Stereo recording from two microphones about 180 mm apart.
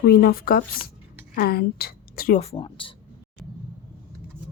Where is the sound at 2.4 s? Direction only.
30° left (ahead or behind).